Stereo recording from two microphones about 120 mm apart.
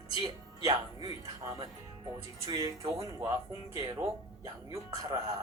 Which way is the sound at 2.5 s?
30° right (ahead or behind).